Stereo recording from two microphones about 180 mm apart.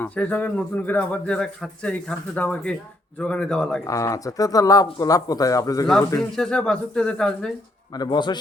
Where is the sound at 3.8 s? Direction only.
20° left (ahead or behind).